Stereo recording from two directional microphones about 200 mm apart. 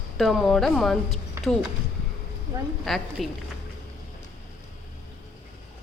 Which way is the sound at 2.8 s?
Centre (ahead or behind).